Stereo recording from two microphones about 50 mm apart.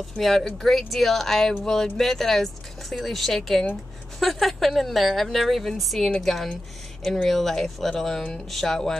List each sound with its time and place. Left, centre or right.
0.2 s a woman's voice: centre